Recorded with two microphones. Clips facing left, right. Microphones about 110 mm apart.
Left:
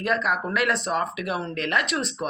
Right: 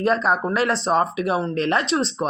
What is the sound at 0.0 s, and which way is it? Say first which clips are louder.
Speech: right 5 dB; 30° right (ahead or behind).